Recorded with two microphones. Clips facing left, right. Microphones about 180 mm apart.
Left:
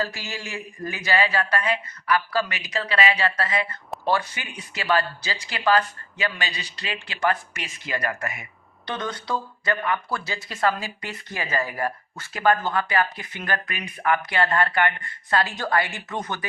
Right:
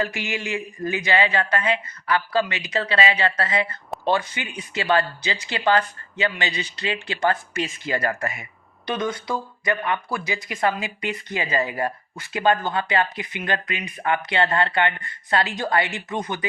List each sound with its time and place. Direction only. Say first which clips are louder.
0.0 s speech: right 4 dB; 20° right (ahead or behind)
8.9 s speech: right 3 dB; 10° right (ahead or behind)